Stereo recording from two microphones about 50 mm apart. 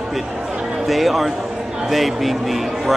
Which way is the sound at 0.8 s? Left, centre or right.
Centre.